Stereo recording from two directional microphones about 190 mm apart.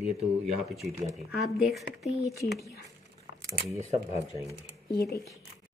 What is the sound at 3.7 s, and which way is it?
Speech, 35° right (ahead or behind).